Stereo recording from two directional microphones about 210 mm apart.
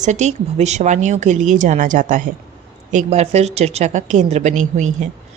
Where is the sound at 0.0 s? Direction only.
35° right (ahead or behind).